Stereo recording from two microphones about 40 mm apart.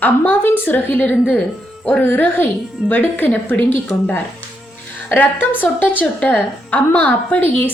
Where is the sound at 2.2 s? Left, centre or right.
Left.